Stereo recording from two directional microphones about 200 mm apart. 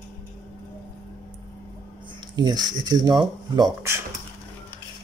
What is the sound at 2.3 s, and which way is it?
Speech, 20° right (ahead or behind).